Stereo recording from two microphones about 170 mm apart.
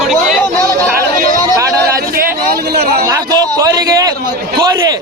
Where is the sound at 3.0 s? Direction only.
20° right (ahead or behind).